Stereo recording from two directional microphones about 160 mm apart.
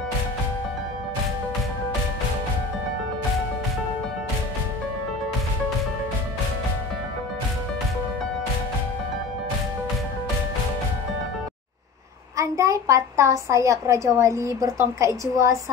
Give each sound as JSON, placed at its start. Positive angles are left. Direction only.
{"t": 12.4, "sound": "a child's voice", "side_deg": -20}